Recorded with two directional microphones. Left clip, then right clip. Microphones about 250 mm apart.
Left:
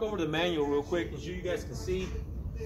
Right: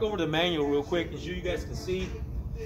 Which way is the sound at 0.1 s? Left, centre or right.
Centre.